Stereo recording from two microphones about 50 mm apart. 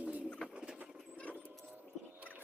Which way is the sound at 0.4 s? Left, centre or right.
Centre.